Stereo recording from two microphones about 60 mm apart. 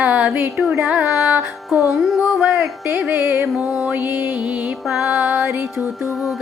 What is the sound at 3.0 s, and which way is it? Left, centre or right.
Music, right.